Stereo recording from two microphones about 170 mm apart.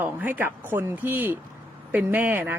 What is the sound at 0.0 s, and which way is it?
Speech, 10° right (ahead or behind).